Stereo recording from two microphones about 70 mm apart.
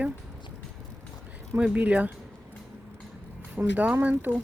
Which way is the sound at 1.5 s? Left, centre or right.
Centre.